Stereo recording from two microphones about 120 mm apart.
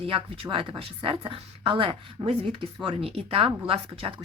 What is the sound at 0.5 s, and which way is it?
Speech, 45° right (ahead or behind).